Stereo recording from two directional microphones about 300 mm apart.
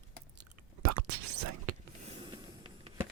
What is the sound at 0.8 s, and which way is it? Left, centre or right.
Whispering, right.